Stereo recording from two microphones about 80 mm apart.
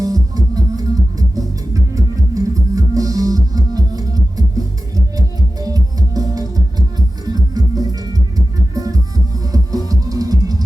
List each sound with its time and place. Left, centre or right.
0.0 s music: right